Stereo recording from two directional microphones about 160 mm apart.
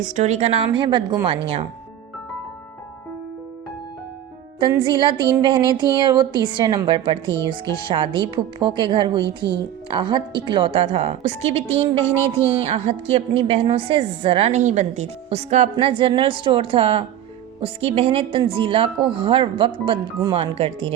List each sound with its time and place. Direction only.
0.0 s speech: 45° right (ahead or behind)
4.8 s speech: 30° right (ahead or behind)
12.1 s a woman's voice: 15° left (ahead or behind)
12.6 s speech: 40° right (ahead or behind)